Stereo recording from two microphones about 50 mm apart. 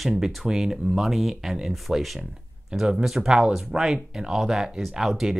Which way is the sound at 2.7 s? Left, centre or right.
Right.